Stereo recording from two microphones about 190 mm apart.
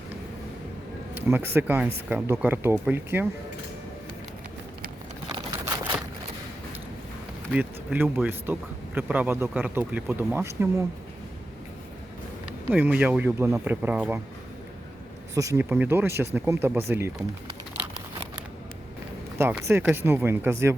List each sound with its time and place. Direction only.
1.1 s speech: 10° right (ahead or behind)
5.3 s a sound: 15° right (ahead or behind)
7.5 s speech: 10° right (ahead or behind)
12.5 s speech: 10° right (ahead or behind)
15.4 s speech: 15° right (ahead or behind)
19.4 s speech: 10° right (ahead or behind)